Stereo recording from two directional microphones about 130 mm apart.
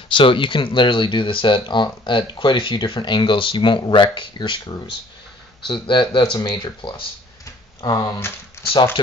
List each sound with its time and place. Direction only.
0.1 s speech: 40° left (ahead or behind)